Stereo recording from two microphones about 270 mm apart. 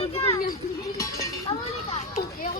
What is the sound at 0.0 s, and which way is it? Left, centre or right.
Children playing, left.